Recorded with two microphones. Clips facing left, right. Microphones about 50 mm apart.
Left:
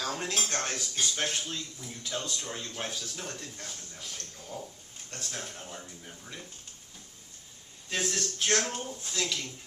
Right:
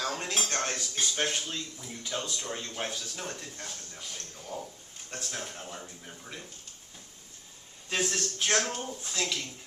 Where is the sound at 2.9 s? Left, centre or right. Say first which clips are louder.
Right 1 dB; centre.